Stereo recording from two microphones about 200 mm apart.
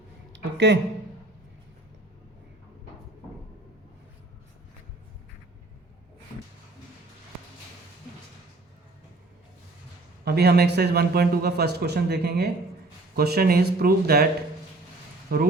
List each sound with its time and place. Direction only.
0.3 s speech: 60° right (ahead or behind)
10.2 s speech: 55° right (ahead or behind)
15.3 s speech: 50° right (ahead or behind)